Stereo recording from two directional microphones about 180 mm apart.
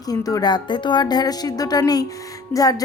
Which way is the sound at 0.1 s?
20° left (ahead or behind).